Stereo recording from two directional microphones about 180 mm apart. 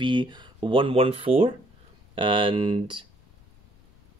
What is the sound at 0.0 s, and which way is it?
Speech, 25° right (ahead or behind).